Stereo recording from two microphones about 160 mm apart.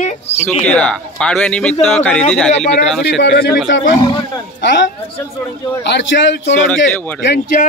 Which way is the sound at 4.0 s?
30° left (ahead or behind).